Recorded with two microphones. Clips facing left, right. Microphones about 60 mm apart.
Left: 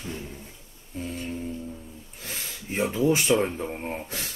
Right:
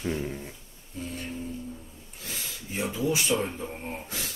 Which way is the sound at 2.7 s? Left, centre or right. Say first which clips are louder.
Left 5 dB; left.